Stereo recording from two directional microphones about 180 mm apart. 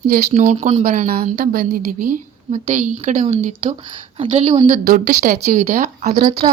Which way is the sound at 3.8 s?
25° right (ahead or behind).